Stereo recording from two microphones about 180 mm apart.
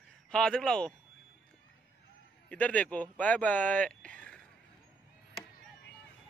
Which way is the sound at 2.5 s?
10° left (ahead or behind).